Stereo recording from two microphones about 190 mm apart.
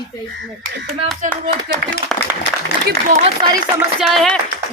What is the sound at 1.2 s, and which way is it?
Speech, 40° right (ahead or behind).